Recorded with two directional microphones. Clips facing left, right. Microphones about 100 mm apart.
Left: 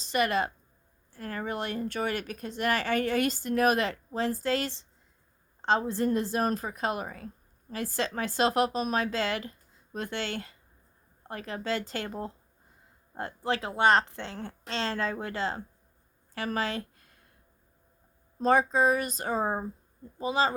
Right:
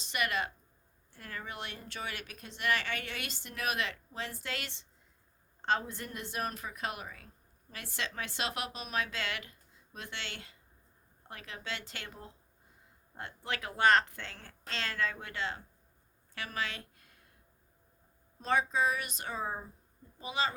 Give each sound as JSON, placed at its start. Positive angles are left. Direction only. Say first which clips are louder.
{"t": 0.0, "sound": "speech", "louder": "left 7 dB", "side_deg": 35}
{"t": 16.3, "sound": "a sound", "louder": "left 8 dB", "side_deg": 35}
{"t": 18.3, "sound": "speech", "louder": "left 7 dB", "side_deg": 40}